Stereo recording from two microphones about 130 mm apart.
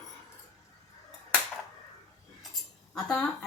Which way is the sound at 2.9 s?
Centre (ahead or behind).